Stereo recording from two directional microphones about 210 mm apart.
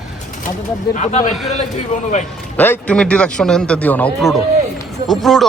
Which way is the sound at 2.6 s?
10° left (ahead or behind).